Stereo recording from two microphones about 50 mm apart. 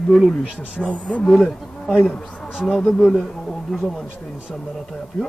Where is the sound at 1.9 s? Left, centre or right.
Left.